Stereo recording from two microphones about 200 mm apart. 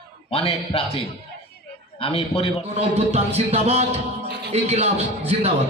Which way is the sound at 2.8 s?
30° right (ahead or behind).